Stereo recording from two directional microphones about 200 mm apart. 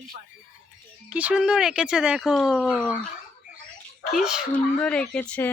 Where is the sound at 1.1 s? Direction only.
5° right (ahead or behind).